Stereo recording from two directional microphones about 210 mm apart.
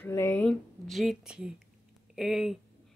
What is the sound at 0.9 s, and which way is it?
Speech, centre (ahead or behind).